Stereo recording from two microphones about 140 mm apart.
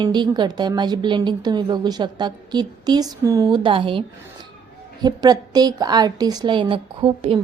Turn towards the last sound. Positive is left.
turn(degrees=-45)  # may be behind; listen again after turning